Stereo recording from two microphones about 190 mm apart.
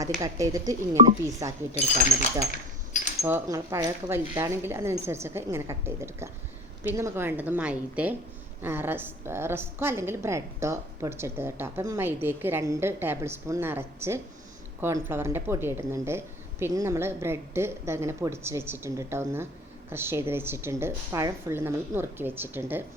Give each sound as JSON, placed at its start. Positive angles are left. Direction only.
{"t": 0.2, "sound": "a woman's voice", "side_deg": -15}